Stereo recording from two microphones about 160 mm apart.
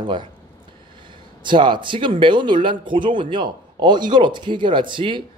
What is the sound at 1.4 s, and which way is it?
A man's voice, 30° right (ahead or behind).